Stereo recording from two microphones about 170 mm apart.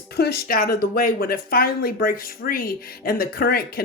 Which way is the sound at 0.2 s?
65° left (ahead or behind).